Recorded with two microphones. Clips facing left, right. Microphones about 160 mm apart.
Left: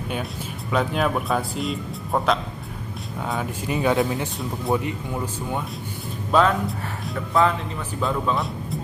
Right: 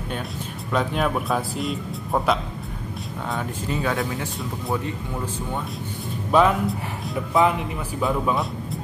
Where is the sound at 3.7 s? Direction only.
20° left (ahead or behind).